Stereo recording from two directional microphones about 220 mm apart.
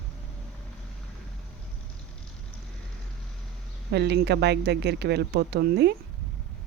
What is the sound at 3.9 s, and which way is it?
Speech, 50° right (ahead or behind).